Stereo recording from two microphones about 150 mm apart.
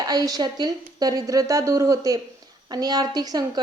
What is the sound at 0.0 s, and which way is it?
Speech, 25° right (ahead or behind).